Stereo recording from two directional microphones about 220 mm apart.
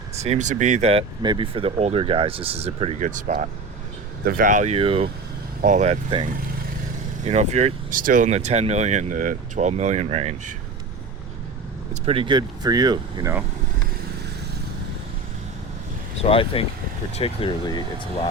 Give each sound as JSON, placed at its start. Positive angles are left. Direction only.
{"t": 0.2, "sound": "speech", "side_deg": -30}
{"t": 7.3, "sound": "speech", "side_deg": -30}
{"t": 12.0, "sound": "speech", "side_deg": -25}
{"t": 16.2, "sound": "speech", "side_deg": 25}